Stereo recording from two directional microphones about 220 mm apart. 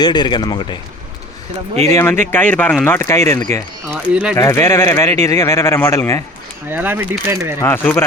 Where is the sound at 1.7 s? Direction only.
30° right (ahead or behind).